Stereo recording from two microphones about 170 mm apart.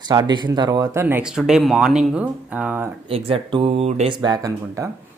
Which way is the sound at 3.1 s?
35° right (ahead or behind).